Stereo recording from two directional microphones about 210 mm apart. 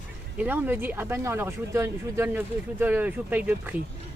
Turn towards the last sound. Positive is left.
turn(degrees=-10)  # may be behind; listen again after turning